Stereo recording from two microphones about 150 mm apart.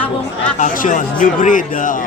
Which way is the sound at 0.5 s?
60° left (ahead or behind).